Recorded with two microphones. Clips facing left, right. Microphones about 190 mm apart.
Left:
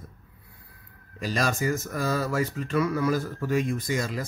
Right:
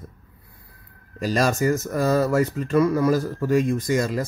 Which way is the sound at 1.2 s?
40° right (ahead or behind).